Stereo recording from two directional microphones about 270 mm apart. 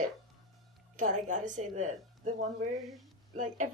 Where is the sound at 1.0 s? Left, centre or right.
Right.